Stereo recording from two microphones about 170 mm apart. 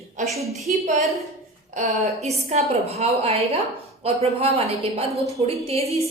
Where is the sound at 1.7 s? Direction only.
40° right (ahead or behind).